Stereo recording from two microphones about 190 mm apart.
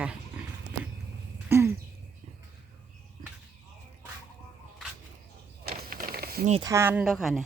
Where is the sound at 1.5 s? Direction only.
15° right (ahead or behind).